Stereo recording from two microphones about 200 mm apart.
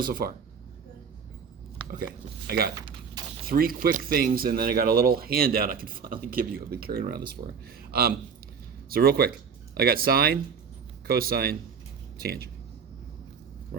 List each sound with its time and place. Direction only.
0.0 s speech: 45° right (ahead or behind)
2.5 s speech: 50° right (ahead or behind)
2.7 s typing: 20° right (ahead or behind)
3.4 s speech: 45° right (ahead or behind)